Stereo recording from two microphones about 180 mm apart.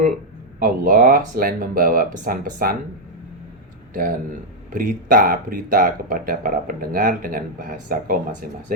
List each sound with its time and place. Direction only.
0.6 s speech: 50° right (ahead or behind)
4.7 s speech: 45° right (ahead or behind)